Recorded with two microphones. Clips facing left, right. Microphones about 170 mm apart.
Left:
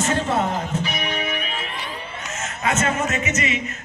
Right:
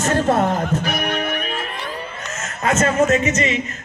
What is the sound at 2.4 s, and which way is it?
A man's voice, 45° right (ahead or behind).